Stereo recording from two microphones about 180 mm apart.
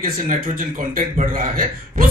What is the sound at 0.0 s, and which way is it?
Speech, 50° right (ahead or behind).